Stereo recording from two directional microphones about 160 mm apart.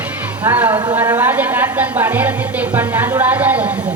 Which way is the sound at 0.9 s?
10° right (ahead or behind).